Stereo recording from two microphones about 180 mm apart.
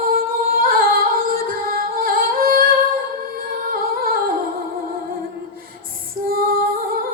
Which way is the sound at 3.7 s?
55° right (ahead or behind).